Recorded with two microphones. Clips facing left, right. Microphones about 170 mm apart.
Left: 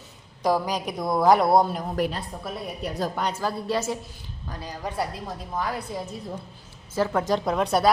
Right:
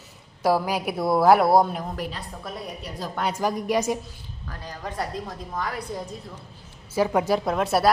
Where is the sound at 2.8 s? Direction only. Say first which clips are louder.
Left 6 dB; 50° left (ahead or behind).